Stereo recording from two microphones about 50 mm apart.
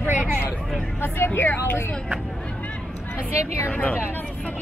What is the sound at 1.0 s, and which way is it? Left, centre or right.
Vehicle, left.